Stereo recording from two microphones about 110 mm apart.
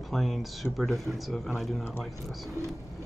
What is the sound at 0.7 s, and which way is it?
Speech, centre (ahead or behind).